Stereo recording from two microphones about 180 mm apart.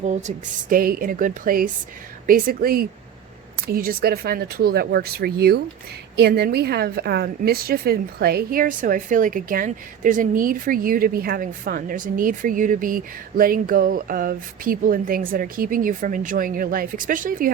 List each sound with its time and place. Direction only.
0.0 s a woman's voice: 40° right (ahead or behind)